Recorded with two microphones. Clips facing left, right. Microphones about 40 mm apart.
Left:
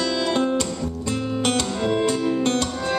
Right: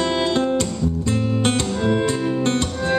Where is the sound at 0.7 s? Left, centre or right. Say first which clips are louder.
Right 4 dB; centre.